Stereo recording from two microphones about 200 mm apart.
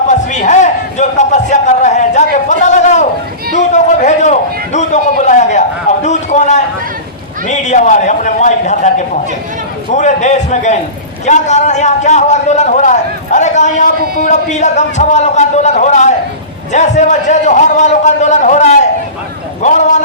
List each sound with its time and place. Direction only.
0.1 s a sound: 35° left (ahead or behind)
7.4 s a man's voice: 35° left (ahead or behind)
9.9 s a man's voice: 35° left (ahead or behind)